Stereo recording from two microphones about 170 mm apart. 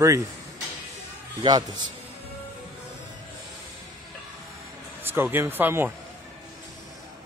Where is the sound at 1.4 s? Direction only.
25° right (ahead or behind).